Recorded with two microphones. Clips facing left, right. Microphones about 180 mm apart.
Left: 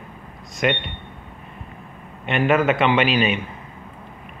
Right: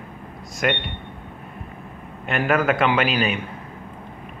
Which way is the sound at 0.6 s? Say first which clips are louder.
Left 1 dB; 5° right (ahead or behind).